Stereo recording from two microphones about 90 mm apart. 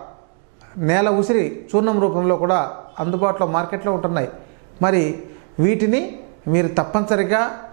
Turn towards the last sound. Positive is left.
turn(degrees=-20)  # may be behind; listen again after turning